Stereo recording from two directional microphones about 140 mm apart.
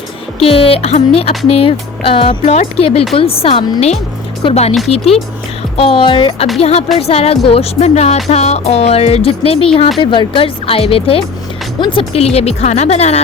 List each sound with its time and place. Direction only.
0.3 s music: 40° left (ahead or behind)
5.7 s speech: 40° left (ahead or behind)
6.6 s music: 45° left (ahead or behind)
10.0 s speech: 35° left (ahead or behind)
11.8 s music: 40° left (ahead or behind)